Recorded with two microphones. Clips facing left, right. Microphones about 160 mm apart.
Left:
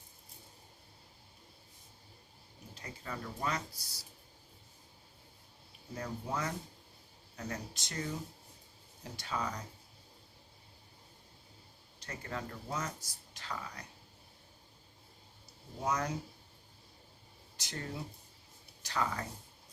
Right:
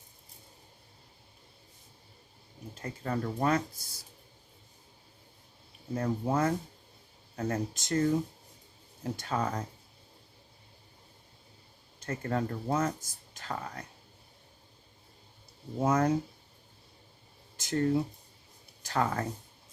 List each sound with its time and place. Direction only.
2.8 s speech: 50° right (ahead or behind)
5.9 s speech: 50° right (ahead or behind)
9.1 s speech: 50° right (ahead or behind)
11.9 s speech: 50° right (ahead or behind)
15.8 s speech: 50° right (ahead or behind)
17.6 s speech: 50° right (ahead or behind)